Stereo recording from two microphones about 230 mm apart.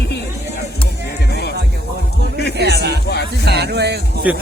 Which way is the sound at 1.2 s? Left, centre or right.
Left.